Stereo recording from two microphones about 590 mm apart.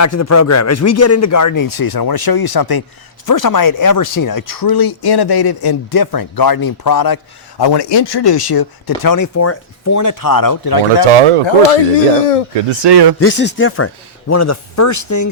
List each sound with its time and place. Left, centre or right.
0.0 s speech: left
11.0 s speech: right
11.7 s speech: left
12.8 s speech: right
13.1 s speech: centre